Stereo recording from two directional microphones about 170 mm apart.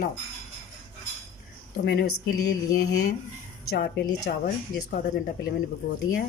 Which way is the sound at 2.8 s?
75° left (ahead or behind).